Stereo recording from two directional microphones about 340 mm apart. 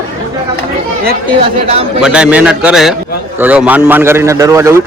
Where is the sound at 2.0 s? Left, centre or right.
Centre.